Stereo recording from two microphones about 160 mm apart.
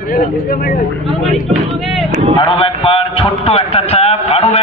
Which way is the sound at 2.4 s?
35° left (ahead or behind).